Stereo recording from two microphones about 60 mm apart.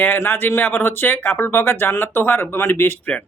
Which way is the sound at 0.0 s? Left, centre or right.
Left.